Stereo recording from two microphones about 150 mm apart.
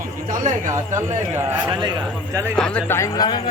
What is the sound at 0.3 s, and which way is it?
Speech, 60° right (ahead or behind).